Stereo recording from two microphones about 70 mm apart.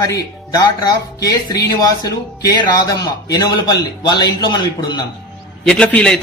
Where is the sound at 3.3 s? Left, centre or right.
Left.